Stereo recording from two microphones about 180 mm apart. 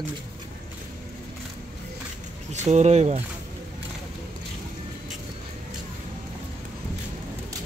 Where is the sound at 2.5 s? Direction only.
40° right (ahead or behind).